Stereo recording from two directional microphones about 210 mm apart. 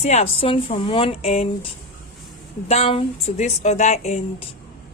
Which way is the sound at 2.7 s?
30° left (ahead or behind).